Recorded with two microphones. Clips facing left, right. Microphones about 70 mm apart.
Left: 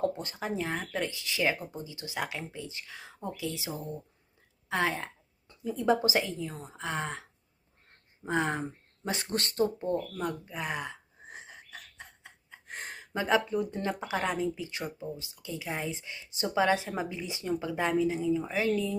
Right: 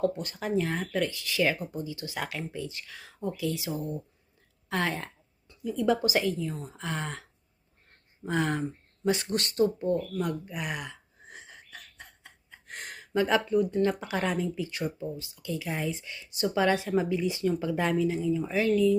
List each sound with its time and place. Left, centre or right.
0.2 s speech: left